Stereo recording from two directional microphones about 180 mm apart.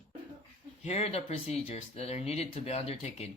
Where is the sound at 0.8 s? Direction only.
35° left (ahead or behind).